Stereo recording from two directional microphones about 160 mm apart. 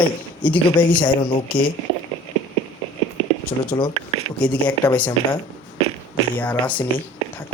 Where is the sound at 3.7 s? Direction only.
25° left (ahead or behind).